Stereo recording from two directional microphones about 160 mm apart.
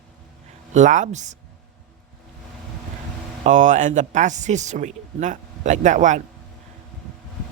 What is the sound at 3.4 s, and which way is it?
Speech, 50° right (ahead or behind).